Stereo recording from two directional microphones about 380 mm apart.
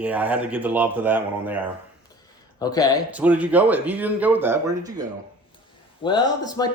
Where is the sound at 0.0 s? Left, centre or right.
Centre.